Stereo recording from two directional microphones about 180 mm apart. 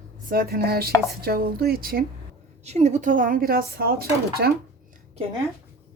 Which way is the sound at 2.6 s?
40° right (ahead or behind).